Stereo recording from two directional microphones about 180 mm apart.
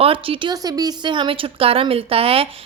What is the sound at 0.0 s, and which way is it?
A woman's voice, 30° right (ahead or behind).